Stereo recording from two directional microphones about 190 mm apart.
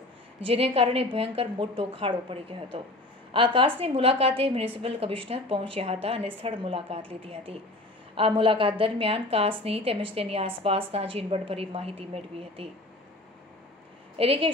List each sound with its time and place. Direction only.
0.4 s a woman's voice: 30° right (ahead or behind)
14.1 s a woman's voice: 30° right (ahead or behind)